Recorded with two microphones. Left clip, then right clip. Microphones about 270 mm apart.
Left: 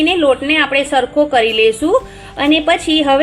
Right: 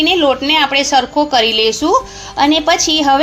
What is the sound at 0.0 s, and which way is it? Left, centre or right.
A woman's voice, right.